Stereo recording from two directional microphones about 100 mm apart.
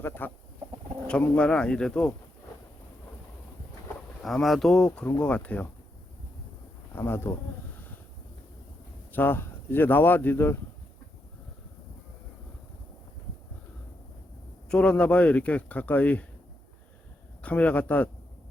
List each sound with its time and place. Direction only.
0.0 s speech: 20° left (ahead or behind)
4.2 s speech: centre (ahead or behind)
5.1 s speech: 15° left (ahead or behind)
6.9 s speech: 25° left (ahead or behind)
9.1 s speech: 20° left (ahead or behind)
14.7 s speech: 10° left (ahead or behind)
17.4 s speech: 15° left (ahead or behind)